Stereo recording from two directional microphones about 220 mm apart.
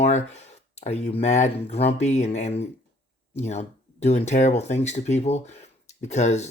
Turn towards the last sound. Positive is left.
turn(degrees=30)  # may be behind; listen again after turning